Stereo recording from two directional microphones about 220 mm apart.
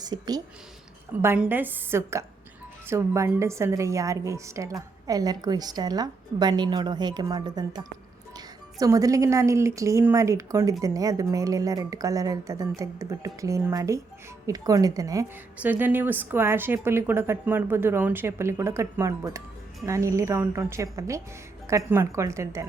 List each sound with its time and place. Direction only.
0.0 s a woman's voice: 15° right (ahead or behind)